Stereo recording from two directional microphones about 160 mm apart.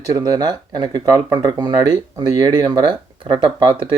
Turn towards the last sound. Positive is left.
turn(degrees=-30)  # may be behind; listen again after turning